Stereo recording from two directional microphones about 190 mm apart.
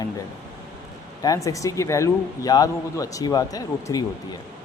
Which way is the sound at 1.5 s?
15° left (ahead or behind).